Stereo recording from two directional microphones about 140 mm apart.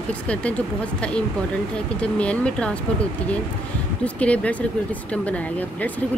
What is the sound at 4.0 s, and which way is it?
Speech, 10° left (ahead or behind).